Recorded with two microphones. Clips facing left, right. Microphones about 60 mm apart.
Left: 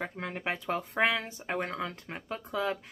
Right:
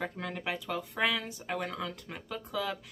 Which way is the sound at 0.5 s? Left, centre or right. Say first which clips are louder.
Left 4 dB; left.